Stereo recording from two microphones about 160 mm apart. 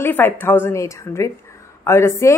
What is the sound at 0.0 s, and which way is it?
A woman's voice, 15° left (ahead or behind).